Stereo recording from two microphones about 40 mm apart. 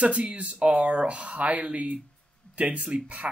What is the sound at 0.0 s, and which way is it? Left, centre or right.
Speech, right.